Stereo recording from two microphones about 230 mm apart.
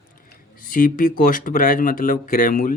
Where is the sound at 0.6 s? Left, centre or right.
Left.